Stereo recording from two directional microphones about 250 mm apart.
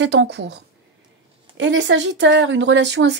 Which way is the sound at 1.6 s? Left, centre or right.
Right.